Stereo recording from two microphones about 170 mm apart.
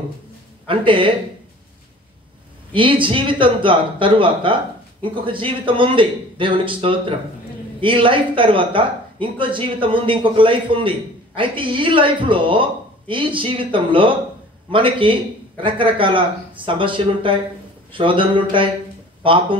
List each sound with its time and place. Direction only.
0.7 s speech: 30° right (ahead or behind)
2.7 s speech: 30° right (ahead or behind)